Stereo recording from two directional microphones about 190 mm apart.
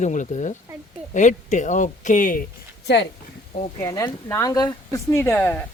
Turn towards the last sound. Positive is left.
turn(degrees=10)  # may be behind; listen again after turning